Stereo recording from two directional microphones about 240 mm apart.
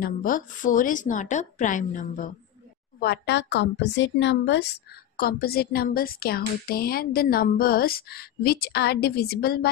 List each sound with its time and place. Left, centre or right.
0.0 s a woman's voice: left
3.0 s a woman's voice: left